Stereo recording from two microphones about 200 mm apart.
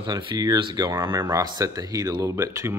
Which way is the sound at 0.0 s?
25° right (ahead or behind).